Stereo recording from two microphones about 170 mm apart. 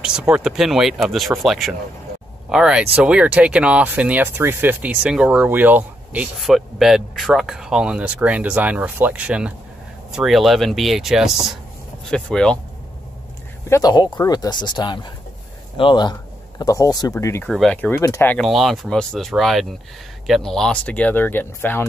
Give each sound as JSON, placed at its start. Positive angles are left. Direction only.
{"t": 0.0, "sound": "speech", "side_deg": -5}
{"t": 13.7, "sound": "speech", "side_deg": 20}
{"t": 17.5, "sound": "speech", "side_deg": 5}
{"t": 18.4, "sound": "speech", "side_deg": 0}